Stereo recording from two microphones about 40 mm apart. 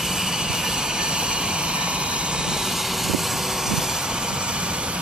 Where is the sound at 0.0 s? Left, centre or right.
Centre.